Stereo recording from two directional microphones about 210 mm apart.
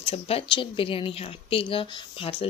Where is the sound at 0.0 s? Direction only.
30° left (ahead or behind).